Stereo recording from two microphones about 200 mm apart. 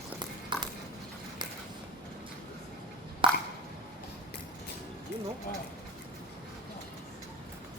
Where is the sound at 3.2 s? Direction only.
25° right (ahead or behind).